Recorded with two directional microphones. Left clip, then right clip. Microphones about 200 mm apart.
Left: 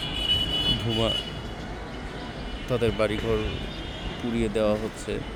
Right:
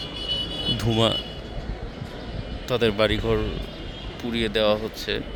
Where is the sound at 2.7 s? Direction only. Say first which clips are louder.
Right 4 dB; 30° right (ahead or behind).